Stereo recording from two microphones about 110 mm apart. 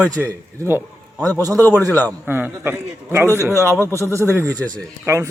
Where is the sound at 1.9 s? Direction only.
15° left (ahead or behind).